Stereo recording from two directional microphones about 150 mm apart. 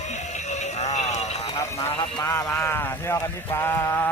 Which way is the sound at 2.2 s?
20° left (ahead or behind).